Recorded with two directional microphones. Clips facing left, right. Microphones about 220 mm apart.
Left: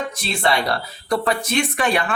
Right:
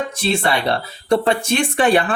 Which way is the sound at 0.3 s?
25° right (ahead or behind).